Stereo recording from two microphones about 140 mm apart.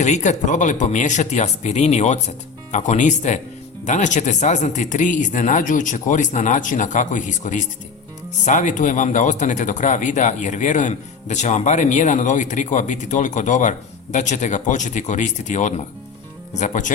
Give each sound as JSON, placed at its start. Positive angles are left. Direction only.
{"t": 0.0, "sound": "speech", "side_deg": 60}